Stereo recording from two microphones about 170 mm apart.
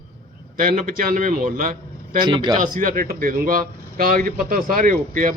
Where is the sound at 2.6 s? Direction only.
50° right (ahead or behind).